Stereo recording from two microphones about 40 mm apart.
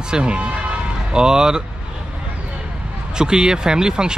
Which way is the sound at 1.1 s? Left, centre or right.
Centre.